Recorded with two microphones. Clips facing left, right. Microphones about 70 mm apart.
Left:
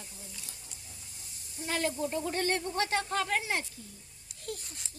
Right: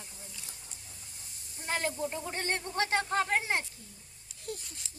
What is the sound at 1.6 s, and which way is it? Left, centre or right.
Speech, right.